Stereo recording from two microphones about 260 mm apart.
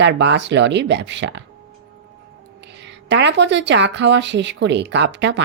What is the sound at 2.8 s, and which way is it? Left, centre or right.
Speech, right.